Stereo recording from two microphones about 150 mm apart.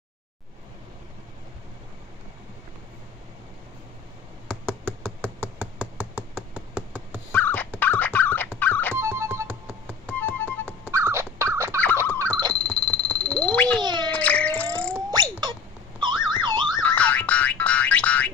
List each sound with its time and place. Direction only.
5.6 s hands: 5° right (ahead or behind)
7.3 s fowl: 10° left (ahead or behind)
8.5 s music: 10° left (ahead or behind)
8.9 s music: 15° right (ahead or behind)
10.2 s music: 10° left (ahead or behind)
10.9 s dog: 15° right (ahead or behind)
12.1 s a sound: 15° left (ahead or behind)
12.5 s frog: 10° left (ahead or behind)
13.7 s cat: 30° right (ahead or behind)
14.1 s a sound: 10° left (ahead or behind)
15.0 s a sound: 25° right (ahead or behind)
16.0 s car alarm: 30° right (ahead or behind)
16.7 s boing: 10° left (ahead or behind)